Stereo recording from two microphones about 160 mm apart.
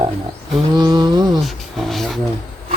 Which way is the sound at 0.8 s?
30° right (ahead or behind).